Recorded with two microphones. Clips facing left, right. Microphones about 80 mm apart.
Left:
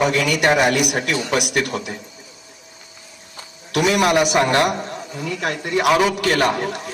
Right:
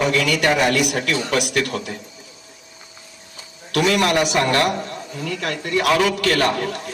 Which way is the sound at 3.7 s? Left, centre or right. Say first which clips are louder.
Left 1 dB; centre.